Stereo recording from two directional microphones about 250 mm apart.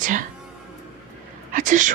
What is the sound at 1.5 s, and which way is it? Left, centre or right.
Speech, right.